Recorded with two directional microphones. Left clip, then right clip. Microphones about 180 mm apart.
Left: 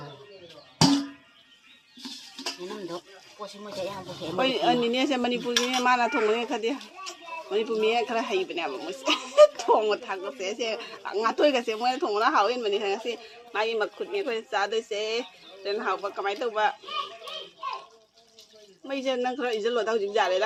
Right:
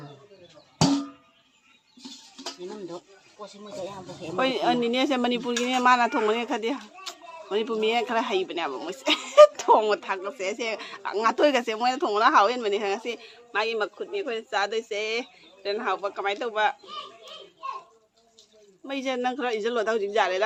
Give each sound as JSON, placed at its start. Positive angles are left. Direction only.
{"t": 2.0, "sound": "a sound", "side_deg": -30}
{"t": 3.4, "sound": "a man's voice", "side_deg": 0}
{"t": 18.9, "sound": "a man's voice", "side_deg": -5}